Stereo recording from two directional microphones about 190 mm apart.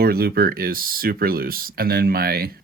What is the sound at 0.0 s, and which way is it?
Speech, 55° right (ahead or behind).